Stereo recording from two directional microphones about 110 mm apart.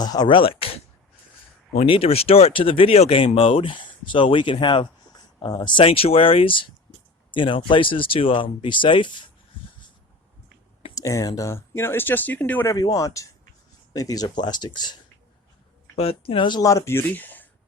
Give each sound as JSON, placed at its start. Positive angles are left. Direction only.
{"t": 0.0, "sound": "speech", "side_deg": 40}
{"t": 0.3, "sound": "a sound", "side_deg": 55}
{"t": 1.9, "sound": "speech", "side_deg": 60}
{"t": 5.8, "sound": "speech", "side_deg": 60}
{"t": 10.9, "sound": "speech", "side_deg": 30}
{"t": 12.7, "sound": "speech", "side_deg": 30}
{"t": 16.0, "sound": "speech", "side_deg": 60}
{"t": 16.6, "sound": "speech", "side_deg": 30}